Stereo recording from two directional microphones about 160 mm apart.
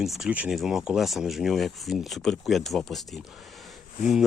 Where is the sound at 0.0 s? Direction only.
Centre (ahead or behind).